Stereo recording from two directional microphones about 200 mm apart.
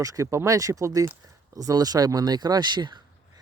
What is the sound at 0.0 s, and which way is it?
Speech, 15° right (ahead or behind).